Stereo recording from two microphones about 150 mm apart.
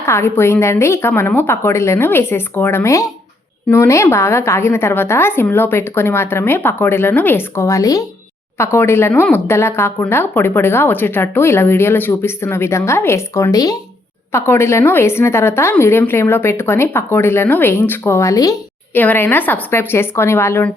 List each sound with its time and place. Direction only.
0.0 s speech: 15° left (ahead or behind)